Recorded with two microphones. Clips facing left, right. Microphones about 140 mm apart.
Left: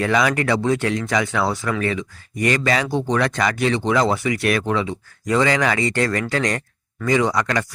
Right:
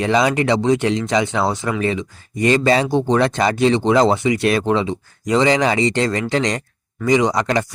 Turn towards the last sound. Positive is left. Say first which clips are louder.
# right 3 dB
turn(degrees=-25)  # may be behind; listen again after turning